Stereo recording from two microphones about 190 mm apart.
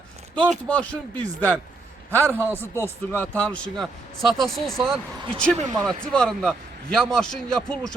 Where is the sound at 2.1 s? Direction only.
15° right (ahead or behind).